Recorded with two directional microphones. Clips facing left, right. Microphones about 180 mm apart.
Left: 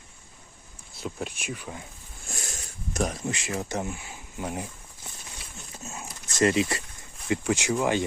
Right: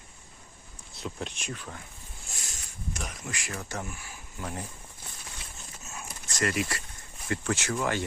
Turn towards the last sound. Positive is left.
turn(degrees=15)  # may be behind; listen again after turning